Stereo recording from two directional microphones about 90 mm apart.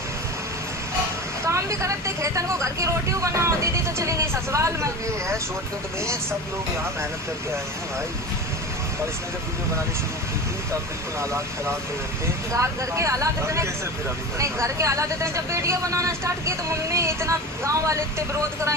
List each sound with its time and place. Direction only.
1.5 s speech: 35° right (ahead or behind)
11.2 s speech: 30° right (ahead or behind)